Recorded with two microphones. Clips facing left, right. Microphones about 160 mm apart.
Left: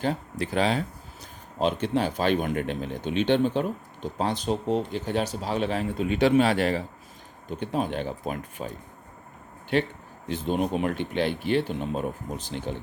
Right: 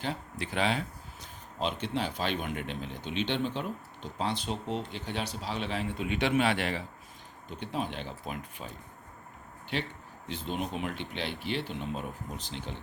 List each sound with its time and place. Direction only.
0.0 s speech: 40° left (ahead or behind)
9.7 s speech: 50° left (ahead or behind)